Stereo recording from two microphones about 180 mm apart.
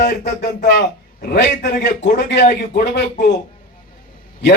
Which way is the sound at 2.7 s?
65° left (ahead or behind).